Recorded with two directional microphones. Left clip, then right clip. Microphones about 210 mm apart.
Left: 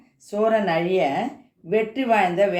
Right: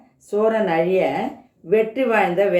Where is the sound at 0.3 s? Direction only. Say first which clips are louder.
Right 2 dB; 40° left (ahead or behind).